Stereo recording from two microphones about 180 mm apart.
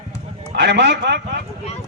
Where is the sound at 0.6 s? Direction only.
70° right (ahead or behind).